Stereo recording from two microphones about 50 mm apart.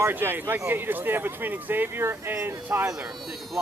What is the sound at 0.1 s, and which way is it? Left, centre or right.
Speech, right.